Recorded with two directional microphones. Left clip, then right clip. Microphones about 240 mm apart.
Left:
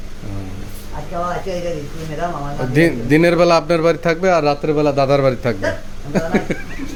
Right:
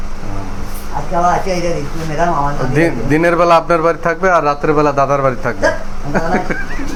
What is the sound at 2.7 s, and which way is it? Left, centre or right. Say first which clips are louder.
A man's voice: left 1 dB; left.